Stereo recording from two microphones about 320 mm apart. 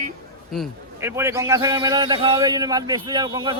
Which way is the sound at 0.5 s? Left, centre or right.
Centre.